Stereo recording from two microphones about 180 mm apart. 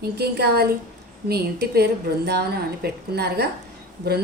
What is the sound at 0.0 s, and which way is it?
A woman's voice, 65° right (ahead or behind).